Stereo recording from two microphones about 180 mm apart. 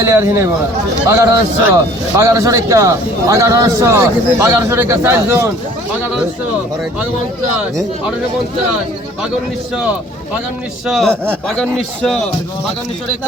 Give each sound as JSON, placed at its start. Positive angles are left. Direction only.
{"t": 0.0, "sound": "a man's voice", "side_deg": -15}
{"t": 10.8, "sound": "speech", "side_deg": 0}